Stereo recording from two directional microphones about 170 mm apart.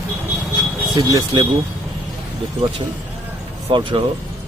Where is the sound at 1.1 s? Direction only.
25° right (ahead or behind).